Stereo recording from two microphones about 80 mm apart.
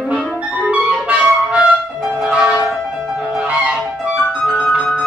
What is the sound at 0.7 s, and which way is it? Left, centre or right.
Clarinet, centre.